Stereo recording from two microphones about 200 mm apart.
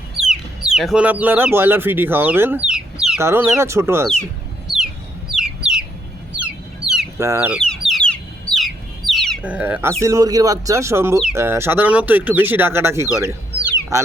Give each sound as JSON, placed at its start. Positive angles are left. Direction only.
{"t": 0.2, "sound": "chicken", "side_deg": -5}
{"t": 1.5, "sound": "speech", "side_deg": -10}
{"t": 4.7, "sound": "chicken", "side_deg": 0}
{"t": 5.3, "sound": "bird", "side_deg": -5}
{"t": 6.3, "sound": "chicken", "side_deg": -5}
{"t": 7.2, "sound": "speech", "side_deg": -15}
{"t": 7.5, "sound": "chicken", "side_deg": 0}
{"t": 10.0, "sound": "speech", "side_deg": -15}